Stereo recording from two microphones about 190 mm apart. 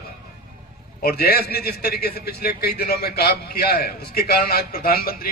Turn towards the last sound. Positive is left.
turn(degrees=50)  # may be behind; listen again after turning